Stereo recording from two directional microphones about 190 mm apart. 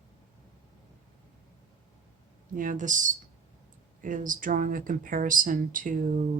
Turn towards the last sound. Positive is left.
turn(degrees=-45)  # may be behind; listen again after turning